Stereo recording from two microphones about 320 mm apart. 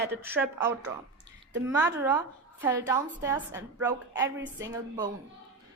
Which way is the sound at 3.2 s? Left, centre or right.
Centre.